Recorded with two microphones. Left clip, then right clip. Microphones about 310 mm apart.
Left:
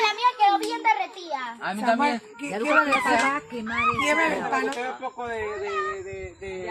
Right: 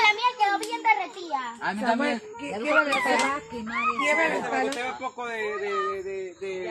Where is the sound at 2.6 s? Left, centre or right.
Left.